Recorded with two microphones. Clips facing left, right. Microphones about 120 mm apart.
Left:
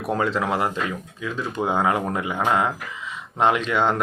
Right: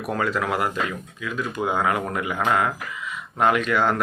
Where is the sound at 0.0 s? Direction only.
25° left (ahead or behind).